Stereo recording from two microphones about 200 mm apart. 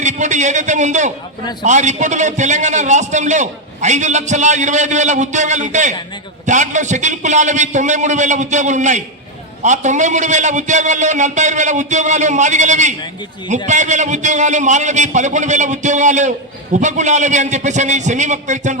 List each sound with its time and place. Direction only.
0.0 s a man's voice: 35° right (ahead or behind)